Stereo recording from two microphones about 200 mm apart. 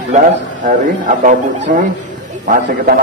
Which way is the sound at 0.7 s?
40° right (ahead or behind).